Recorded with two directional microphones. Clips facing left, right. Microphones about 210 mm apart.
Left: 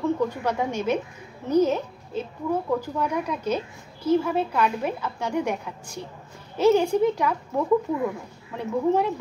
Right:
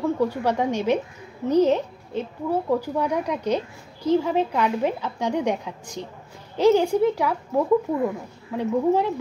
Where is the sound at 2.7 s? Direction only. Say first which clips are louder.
Right 3 dB; 10° right (ahead or behind).